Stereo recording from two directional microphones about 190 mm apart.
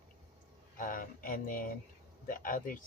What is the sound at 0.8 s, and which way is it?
Speech, 45° left (ahead or behind).